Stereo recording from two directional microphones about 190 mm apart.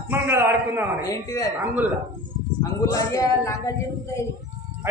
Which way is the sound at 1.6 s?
10° right (ahead or behind).